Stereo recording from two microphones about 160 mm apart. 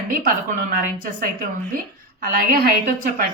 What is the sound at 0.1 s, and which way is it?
A woman's voice, 60° right (ahead or behind).